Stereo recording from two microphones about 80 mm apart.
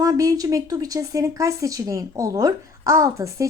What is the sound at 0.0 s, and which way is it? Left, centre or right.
A woman's voice, right.